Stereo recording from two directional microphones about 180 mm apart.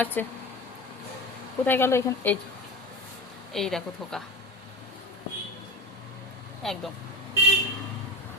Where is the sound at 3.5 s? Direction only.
Centre (ahead or behind).